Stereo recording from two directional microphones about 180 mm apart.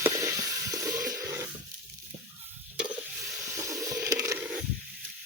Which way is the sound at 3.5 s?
15° right (ahead or behind).